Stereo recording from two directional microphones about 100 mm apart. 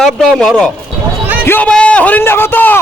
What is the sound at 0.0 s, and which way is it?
Speech, 5° left (ahead or behind).